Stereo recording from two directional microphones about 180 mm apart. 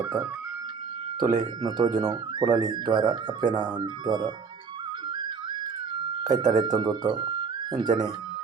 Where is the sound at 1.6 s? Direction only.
20° right (ahead or behind).